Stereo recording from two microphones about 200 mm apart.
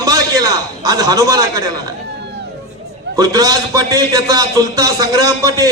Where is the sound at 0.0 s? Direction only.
20° right (ahead or behind).